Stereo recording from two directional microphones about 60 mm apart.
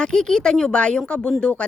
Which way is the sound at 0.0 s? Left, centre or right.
Centre.